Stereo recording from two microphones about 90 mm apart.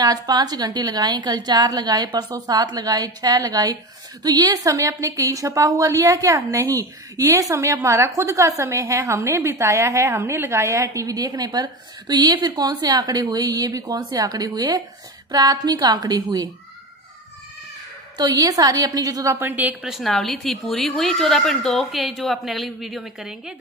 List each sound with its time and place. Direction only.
0.0 s a woman's voice: 45° right (ahead or behind)
18.1 s a woman's voice: 45° right (ahead or behind)
19.3 s a woman's voice: 20° right (ahead or behind)
19.8 s speech: centre (ahead or behind)